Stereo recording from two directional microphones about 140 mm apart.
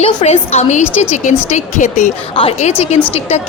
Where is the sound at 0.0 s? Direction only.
50° left (ahead or behind).